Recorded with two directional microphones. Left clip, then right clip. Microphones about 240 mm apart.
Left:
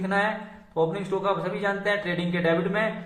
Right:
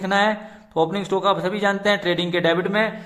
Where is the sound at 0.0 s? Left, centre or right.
Right.